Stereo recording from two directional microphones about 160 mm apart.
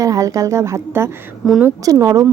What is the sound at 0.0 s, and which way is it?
A woman's voice, 20° right (ahead or behind).